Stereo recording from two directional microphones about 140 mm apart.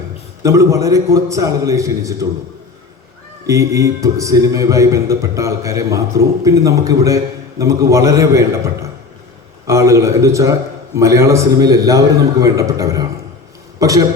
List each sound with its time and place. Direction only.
0.4 s a man's voice: 20° right (ahead or behind)
3.4 s a man's voice: 20° right (ahead or behind)